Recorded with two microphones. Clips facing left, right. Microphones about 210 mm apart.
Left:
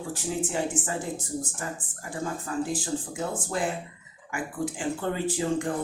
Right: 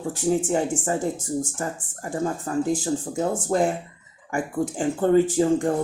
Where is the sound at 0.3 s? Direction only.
45° right (ahead or behind).